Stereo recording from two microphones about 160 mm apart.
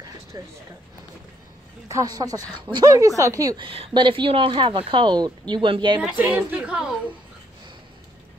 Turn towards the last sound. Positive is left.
turn(degrees=-5)  # may be behind; listen again after turning